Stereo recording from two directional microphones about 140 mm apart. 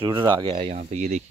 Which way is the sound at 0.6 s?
60° right (ahead or behind).